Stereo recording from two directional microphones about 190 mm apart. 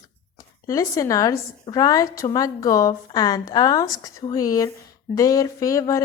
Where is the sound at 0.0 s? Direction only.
20° left (ahead or behind).